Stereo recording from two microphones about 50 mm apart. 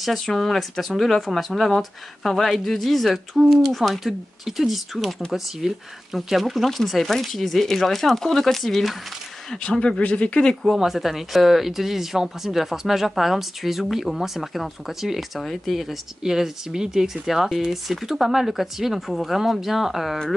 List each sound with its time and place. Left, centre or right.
0.0 s speech: centre
9.5 s speech: centre
10.6 s speech: centre